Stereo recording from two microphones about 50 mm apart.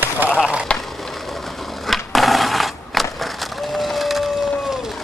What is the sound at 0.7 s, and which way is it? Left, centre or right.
Vehicle, left.